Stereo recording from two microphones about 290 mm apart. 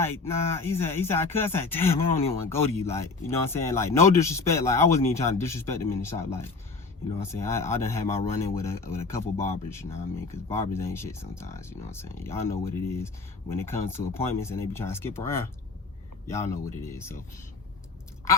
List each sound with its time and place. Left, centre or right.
0.0 s speech: centre